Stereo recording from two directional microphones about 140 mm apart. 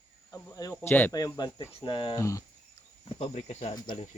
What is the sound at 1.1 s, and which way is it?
Speech, 30° left (ahead or behind).